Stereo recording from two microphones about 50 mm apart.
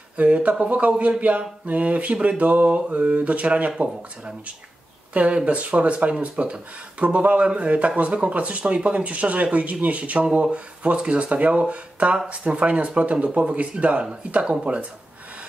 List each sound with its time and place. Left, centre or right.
0.2 s speech: right
5.1 s speech: right